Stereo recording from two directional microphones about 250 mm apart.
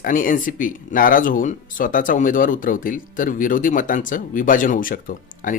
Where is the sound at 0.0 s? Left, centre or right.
Left.